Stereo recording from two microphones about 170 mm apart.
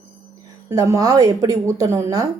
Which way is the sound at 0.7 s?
20° right (ahead or behind).